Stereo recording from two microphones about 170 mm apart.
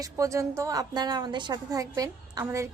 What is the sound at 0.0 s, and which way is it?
A woman's voice, 20° right (ahead or behind).